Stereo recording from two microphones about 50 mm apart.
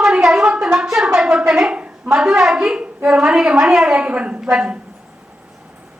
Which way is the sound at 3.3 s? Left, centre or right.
Centre.